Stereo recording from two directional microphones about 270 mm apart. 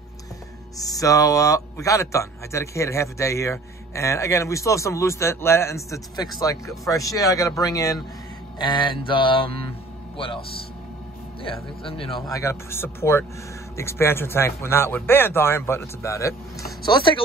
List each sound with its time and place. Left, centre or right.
0.7 s a man's voice: centre
11.4 s speech: centre